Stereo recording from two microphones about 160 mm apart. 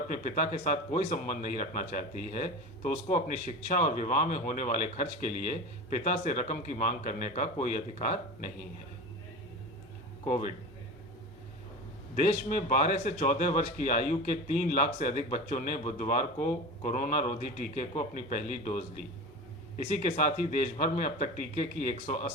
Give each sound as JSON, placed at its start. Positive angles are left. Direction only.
{"t": 0.1, "sound": "a man's voice", "side_deg": 55}
{"t": 10.2, "sound": "speech", "side_deg": 50}
{"t": 12.1, "sound": "a man's voice", "side_deg": 55}
{"t": 19.8, "sound": "speech", "side_deg": 50}